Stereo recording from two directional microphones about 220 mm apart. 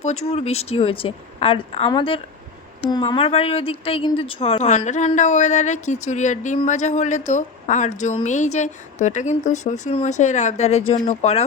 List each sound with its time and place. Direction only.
0.3 s a woman's voice: 30° left (ahead or behind)